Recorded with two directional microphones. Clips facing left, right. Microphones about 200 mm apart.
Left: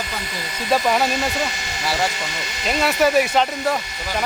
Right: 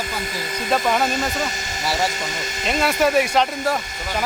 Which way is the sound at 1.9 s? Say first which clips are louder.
Even; centre (ahead or behind).